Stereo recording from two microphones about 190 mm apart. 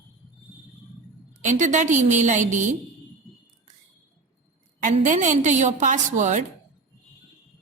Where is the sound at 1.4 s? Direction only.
40° right (ahead or behind).